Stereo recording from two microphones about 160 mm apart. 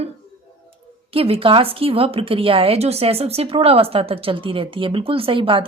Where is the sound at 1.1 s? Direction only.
35° right (ahead or behind).